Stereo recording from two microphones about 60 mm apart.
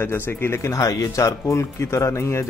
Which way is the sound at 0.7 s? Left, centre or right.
Left.